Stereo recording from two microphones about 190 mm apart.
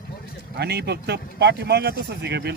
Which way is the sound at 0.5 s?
60° right (ahead or behind).